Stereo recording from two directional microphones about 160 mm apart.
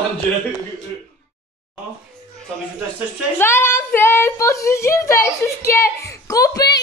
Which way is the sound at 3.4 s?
15° left (ahead or behind).